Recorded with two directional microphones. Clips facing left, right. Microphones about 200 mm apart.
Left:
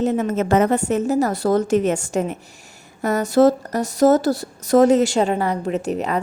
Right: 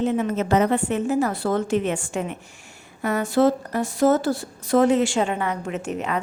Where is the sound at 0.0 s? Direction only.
45° left (ahead or behind).